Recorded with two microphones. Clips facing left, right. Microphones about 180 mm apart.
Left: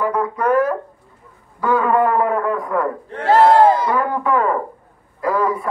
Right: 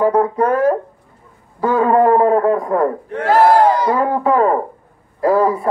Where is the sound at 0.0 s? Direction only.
30° right (ahead or behind).